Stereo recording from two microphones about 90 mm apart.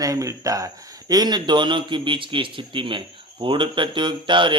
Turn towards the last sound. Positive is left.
turn(degrees=-65)  # may be behind; listen again after turning